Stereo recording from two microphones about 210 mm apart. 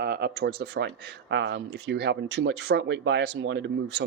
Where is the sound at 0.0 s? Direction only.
50° right (ahead or behind).